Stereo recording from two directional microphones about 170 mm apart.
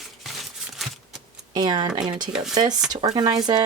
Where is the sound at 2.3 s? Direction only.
5° right (ahead or behind).